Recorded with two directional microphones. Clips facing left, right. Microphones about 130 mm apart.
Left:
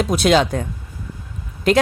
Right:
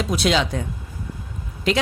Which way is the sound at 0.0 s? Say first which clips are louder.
Left 5 dB; 50° left (ahead or behind).